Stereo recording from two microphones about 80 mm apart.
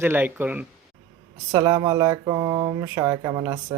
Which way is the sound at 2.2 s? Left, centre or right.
Right.